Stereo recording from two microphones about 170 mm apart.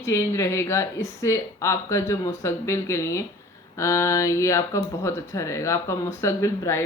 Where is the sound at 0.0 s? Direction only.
15° left (ahead or behind).